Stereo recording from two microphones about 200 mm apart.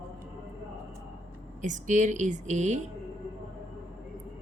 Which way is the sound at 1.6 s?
40° right (ahead or behind).